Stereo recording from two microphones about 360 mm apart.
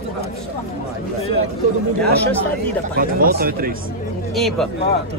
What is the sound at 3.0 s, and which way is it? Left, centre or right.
Speech, right.